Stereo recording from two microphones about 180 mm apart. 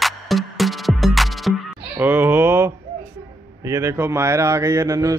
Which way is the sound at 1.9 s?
10° right (ahead or behind).